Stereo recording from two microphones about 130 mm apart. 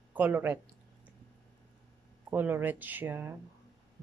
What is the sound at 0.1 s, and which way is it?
Speech, 15° right (ahead or behind).